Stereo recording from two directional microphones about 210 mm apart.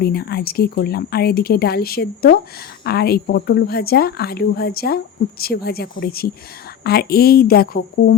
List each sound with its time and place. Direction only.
0.0 s a woman's voice: 50° left (ahead or behind)